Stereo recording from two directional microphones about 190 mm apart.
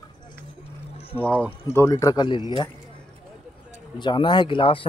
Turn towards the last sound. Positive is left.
turn(degrees=30)  # may be behind; listen again after turning